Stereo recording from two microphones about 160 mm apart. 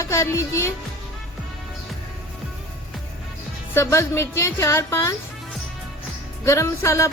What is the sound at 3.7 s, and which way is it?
Music, 15° left (ahead or behind).